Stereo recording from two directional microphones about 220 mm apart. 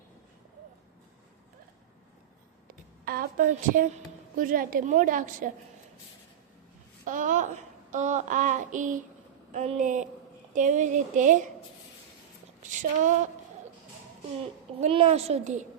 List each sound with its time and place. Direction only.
3.0 s a woman's voice: 40° right (ahead or behind)
7.0 s a child's voice: 35° right (ahead or behind)
12.8 s a woman's voice: 35° right (ahead or behind)
14.8 s a woman's voice: 30° right (ahead or behind)